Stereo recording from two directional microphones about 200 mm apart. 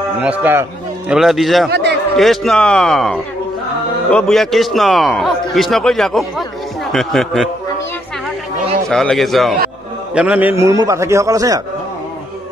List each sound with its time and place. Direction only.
0.2 s a man's voice: 10° right (ahead or behind)
1.7 s a sound: 60° right (ahead or behind)
2.1 s a man's voice: centre (ahead or behind)
8.8 s a man's voice: centre (ahead or behind); by 11.6 s 15° right (ahead or behind)